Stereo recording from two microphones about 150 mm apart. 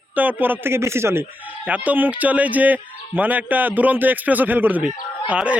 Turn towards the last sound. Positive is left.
turn(degrees=-10)  # may be behind; listen again after turning